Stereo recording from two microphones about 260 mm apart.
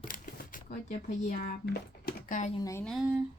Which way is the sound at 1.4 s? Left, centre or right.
Left.